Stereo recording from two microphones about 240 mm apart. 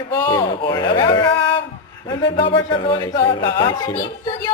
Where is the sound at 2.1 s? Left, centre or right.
Centre.